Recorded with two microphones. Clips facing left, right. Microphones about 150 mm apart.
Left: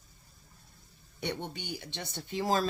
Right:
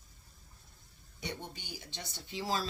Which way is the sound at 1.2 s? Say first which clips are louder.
Left 6 dB; 65° left (ahead or behind).